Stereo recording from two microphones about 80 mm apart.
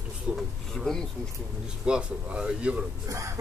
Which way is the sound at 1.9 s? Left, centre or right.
Centre.